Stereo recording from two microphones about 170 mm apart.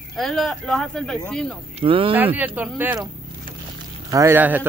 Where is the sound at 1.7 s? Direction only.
30° right (ahead or behind).